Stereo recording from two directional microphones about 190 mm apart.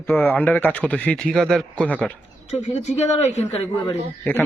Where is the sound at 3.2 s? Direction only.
35° left (ahead or behind).